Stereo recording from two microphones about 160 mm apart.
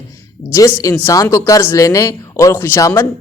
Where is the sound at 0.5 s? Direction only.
20° left (ahead or behind).